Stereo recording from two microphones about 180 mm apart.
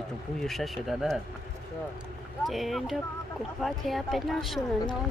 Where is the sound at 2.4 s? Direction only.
Centre (ahead or behind).